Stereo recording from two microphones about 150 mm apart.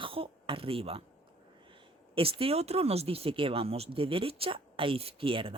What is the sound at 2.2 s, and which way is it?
Speech, 40° right (ahead or behind).